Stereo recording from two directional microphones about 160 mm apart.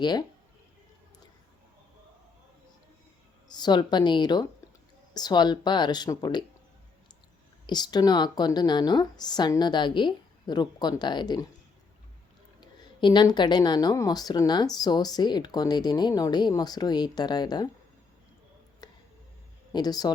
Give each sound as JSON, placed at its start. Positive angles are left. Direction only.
{"t": 0.0, "sound": "speech", "side_deg": 25}
{"t": 3.5, "sound": "speech", "side_deg": 25}
{"t": 7.7, "sound": "speech", "side_deg": 25}
{"t": 12.5, "sound": "speech", "side_deg": 30}
{"t": 18.8, "sound": "a sound", "side_deg": 25}
{"t": 19.7, "sound": "speech", "side_deg": 25}